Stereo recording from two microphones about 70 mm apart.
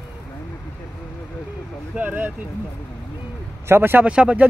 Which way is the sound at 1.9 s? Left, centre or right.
Right.